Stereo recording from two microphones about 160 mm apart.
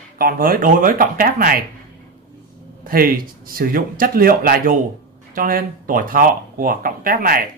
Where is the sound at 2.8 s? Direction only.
65° right (ahead or behind).